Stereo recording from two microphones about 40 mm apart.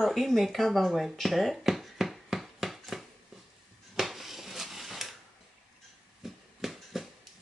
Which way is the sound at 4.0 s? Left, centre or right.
Centre.